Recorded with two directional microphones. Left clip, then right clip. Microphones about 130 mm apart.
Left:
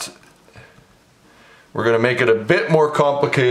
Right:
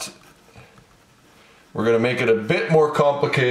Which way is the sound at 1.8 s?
35° left (ahead or behind).